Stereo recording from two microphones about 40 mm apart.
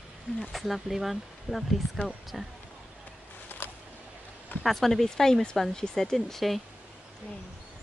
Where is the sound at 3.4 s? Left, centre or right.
Left.